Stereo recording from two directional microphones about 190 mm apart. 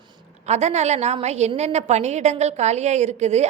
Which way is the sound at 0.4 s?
35° right (ahead or behind).